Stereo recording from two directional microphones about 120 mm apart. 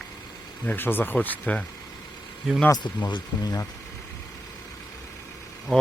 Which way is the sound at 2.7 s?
35° left (ahead or behind).